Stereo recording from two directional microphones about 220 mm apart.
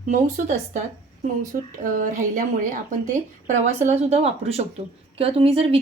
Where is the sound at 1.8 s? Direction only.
35° right (ahead or behind).